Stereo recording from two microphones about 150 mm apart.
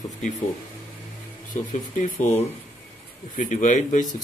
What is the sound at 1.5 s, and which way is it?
Speech, 60° left (ahead or behind).